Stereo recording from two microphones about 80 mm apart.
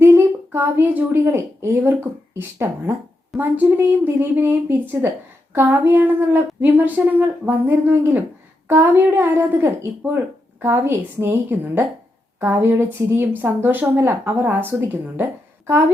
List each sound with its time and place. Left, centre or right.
0.0 s a woman's voice: right